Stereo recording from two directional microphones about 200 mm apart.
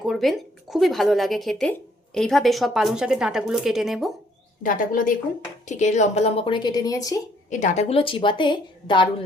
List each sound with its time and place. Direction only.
0.0 s speech: centre (ahead or behind)
4.6 s a woman's voice: 45° left (ahead or behind); by 7.2 s 15° left (ahead or behind)
7.5 s speech: 35° left (ahead or behind)